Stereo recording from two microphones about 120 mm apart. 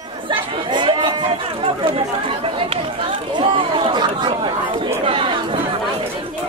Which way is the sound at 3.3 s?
40° right (ahead or behind).